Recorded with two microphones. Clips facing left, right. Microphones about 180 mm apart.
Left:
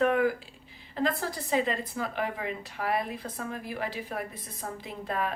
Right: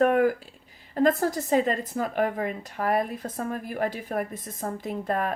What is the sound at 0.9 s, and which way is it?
A woman's voice, 45° right (ahead or behind).